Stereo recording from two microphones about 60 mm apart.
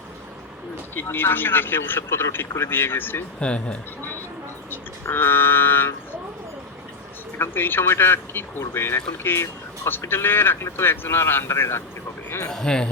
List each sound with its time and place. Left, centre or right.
1.1 s speech: left
3.4 s speech: centre
4.7 s speech: left
7.3 s speech: left
12.5 s speech: centre